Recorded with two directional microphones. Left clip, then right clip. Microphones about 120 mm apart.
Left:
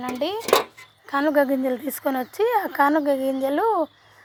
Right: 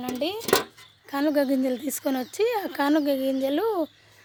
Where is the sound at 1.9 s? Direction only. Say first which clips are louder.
Left 3 dB; 35° right (ahead or behind).